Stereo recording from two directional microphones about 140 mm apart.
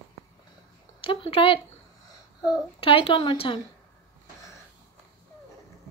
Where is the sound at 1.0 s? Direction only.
40° left (ahead or behind).